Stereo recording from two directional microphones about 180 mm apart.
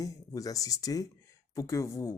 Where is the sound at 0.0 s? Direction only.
20° left (ahead or behind).